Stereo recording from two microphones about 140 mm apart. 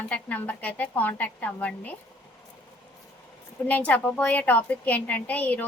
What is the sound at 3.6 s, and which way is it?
Speech, 10° left (ahead or behind).